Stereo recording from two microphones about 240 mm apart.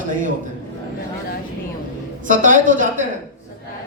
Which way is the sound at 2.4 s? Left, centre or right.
Right.